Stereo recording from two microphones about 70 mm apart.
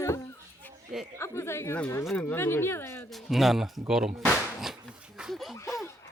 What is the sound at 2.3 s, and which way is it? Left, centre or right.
Speech, left.